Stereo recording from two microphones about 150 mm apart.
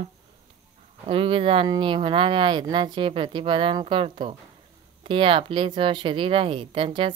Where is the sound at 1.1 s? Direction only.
35° right (ahead or behind).